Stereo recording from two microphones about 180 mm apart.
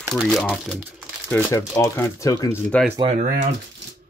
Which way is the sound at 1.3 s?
15° left (ahead or behind).